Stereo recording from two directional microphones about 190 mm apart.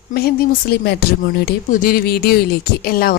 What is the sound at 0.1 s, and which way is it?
A woman's voice, 55° left (ahead or behind).